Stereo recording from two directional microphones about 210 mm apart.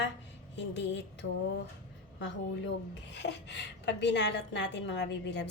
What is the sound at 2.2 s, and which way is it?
A woman's voice, 55° left (ahead or behind).